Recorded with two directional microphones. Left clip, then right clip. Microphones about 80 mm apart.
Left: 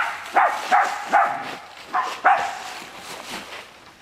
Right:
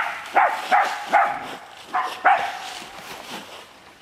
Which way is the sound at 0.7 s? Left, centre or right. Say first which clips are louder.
Even; right.